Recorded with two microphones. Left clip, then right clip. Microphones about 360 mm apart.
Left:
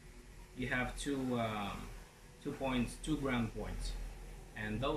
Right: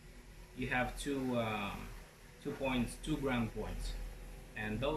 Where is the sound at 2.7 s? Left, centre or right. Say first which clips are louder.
Even; centre.